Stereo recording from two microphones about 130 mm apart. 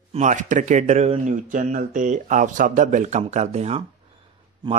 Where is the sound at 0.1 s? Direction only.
70° right (ahead or behind).